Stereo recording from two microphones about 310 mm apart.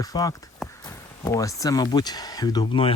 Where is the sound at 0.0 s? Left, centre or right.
Centre.